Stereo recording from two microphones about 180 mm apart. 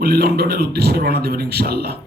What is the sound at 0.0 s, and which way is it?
Speech, 60° right (ahead or behind).